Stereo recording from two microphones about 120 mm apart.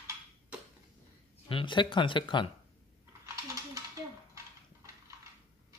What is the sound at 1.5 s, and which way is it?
A man's voice, 45° left (ahead or behind).